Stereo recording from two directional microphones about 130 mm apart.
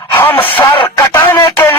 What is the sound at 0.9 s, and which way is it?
Music, 25° left (ahead or behind).